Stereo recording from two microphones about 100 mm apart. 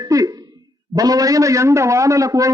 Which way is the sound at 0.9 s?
35° right (ahead or behind).